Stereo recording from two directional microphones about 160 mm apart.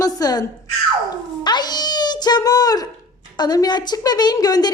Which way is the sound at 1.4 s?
25° left (ahead or behind).